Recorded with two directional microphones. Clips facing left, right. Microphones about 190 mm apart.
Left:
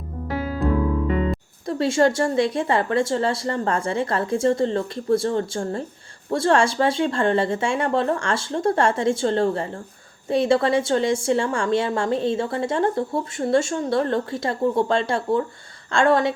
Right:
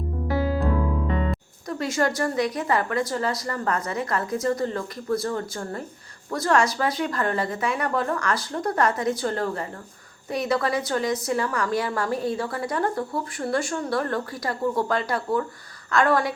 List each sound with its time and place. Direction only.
1.6 s a woman's voice: 25° left (ahead or behind)